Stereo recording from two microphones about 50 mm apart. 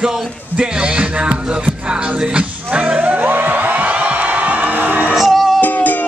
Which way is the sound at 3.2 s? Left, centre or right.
Right.